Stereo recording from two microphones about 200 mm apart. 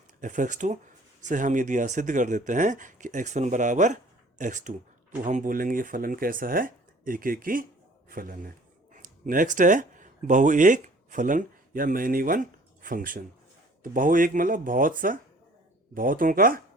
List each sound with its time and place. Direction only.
0.2 s speech: 40° right (ahead or behind)